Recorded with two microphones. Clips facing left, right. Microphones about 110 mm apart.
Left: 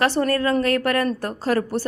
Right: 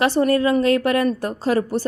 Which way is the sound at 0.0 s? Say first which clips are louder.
Right 3 dB; 15° right (ahead or behind).